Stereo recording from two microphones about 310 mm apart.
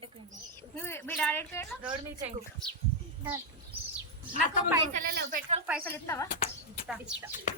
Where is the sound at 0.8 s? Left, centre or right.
Centre.